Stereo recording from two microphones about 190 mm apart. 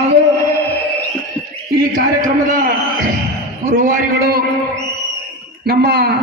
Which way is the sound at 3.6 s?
50° right (ahead or behind).